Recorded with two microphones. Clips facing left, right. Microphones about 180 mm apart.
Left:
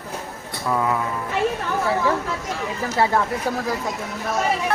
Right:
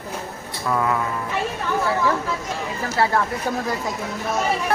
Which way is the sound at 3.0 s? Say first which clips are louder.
Left 1 dB; 15° left (ahead or behind).